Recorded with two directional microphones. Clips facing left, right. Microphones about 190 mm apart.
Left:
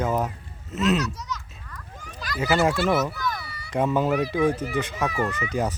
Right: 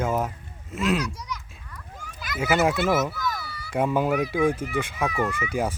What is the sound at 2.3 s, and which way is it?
Speech, centre (ahead or behind).